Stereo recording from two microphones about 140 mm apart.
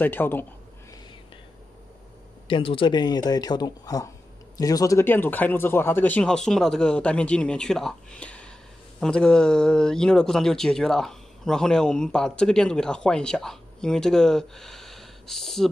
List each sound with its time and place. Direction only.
0.0 s speech: 15° left (ahead or behind)
2.4 s speech: 40° left (ahead or behind); by 15.7 s centre (ahead or behind)